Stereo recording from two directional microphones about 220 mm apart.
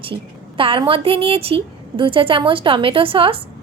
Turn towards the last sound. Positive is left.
turn(degrees=-25)  # may be behind; listen again after turning